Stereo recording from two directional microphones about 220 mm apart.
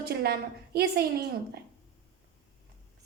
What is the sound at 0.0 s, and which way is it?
A woman's voice, 45° right (ahead or behind).